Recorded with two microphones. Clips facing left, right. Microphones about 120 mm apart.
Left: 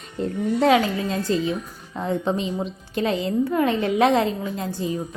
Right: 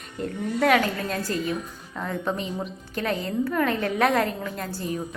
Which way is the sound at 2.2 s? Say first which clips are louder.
Left 4 dB; 25° left (ahead or behind).